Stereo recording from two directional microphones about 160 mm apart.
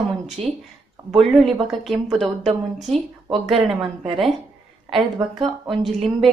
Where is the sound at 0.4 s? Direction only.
35° right (ahead or behind).